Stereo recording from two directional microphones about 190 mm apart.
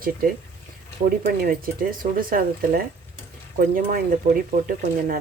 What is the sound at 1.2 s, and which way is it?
Speech, 50° right (ahead or behind).